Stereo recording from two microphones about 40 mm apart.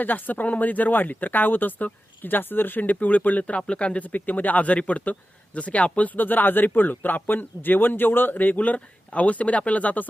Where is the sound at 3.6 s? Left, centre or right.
Left.